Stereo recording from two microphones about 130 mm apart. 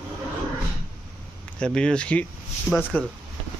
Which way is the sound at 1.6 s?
5° left (ahead or behind).